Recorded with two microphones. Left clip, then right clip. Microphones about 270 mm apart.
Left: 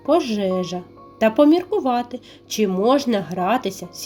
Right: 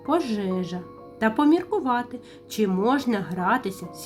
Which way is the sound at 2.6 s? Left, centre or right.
Right.